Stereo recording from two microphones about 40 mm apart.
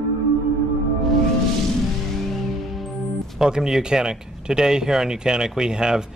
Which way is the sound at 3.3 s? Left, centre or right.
Centre.